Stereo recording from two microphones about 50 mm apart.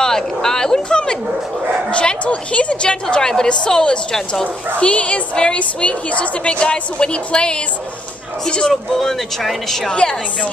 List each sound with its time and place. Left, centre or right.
0.0 s a sound: centre
1.9 s a woman's voice: left
8.9 s speech: centre
9.8 s speech: centre